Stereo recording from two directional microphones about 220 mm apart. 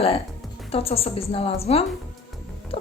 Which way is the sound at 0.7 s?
25° left (ahead or behind).